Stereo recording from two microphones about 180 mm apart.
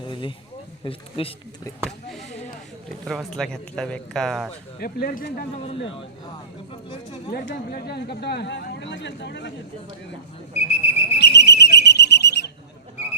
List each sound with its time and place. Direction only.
0.0 s a sound: 25° left (ahead or behind)
0.9 s speech: 30° left (ahead or behind)
3.1 s speech: centre (ahead or behind)
4.8 s speech: 55° left (ahead or behind)
7.3 s speech: 60° left (ahead or behind); by 9.5 s 80° left
10.6 s whistle: 35° left (ahead or behind)
11.2 s whistle: 65° left (ahead or behind)